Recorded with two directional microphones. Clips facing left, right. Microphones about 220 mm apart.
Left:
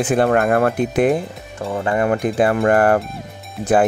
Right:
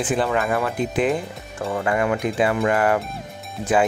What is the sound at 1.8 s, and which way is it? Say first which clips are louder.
Speech: left 3 dB; 30° left (ahead or behind).